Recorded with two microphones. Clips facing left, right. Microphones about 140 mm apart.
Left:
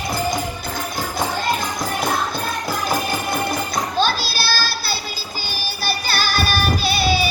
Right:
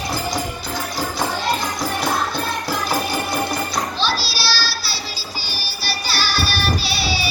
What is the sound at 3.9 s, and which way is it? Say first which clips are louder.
Music: left 3 dB; 50° left (ahead or behind).